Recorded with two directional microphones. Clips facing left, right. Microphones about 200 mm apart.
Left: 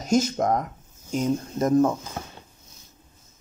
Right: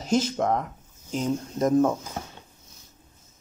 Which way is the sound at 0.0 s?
45° left (ahead or behind).